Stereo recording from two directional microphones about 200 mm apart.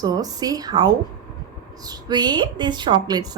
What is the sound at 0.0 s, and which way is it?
A woman's voice, 20° right (ahead or behind).